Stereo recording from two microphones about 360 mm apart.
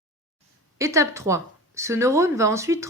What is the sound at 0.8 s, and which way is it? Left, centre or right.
Speech, centre.